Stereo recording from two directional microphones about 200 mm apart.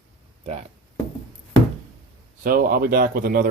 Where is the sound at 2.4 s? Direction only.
45° right (ahead or behind).